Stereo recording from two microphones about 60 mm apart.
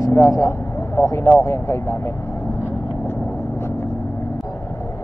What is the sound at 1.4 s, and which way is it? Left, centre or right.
Speech, left.